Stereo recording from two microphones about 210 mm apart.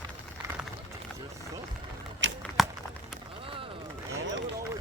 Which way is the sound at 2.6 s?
Centre (ahead or behind).